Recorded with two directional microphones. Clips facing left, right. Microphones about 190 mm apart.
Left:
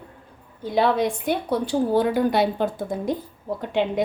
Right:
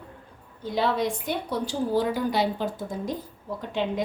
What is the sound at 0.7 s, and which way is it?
A woman's voice, 60° left (ahead or behind).